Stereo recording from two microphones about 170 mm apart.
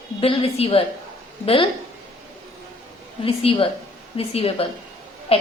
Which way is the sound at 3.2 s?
35° left (ahead or behind).